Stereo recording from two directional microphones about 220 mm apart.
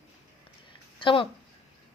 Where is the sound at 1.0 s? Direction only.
25° left (ahead or behind).